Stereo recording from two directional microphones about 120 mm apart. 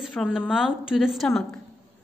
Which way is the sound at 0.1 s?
5° left (ahead or behind).